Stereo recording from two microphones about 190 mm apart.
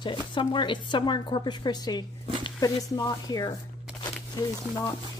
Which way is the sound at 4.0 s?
20° left (ahead or behind).